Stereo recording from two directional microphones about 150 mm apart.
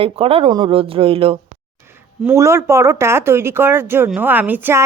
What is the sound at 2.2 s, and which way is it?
Speech, 20° right (ahead or behind).